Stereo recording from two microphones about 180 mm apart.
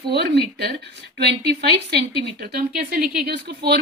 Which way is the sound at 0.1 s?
65° right (ahead or behind).